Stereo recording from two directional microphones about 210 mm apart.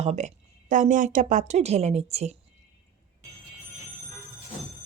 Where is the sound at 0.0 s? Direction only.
30° right (ahead or behind).